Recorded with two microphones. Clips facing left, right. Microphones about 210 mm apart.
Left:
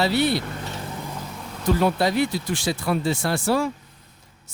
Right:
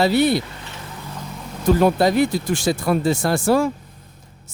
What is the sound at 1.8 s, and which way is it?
Speech, 45° right (ahead or behind).